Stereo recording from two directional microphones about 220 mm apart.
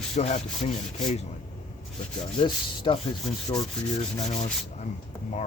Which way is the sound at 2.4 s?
20° left (ahead or behind).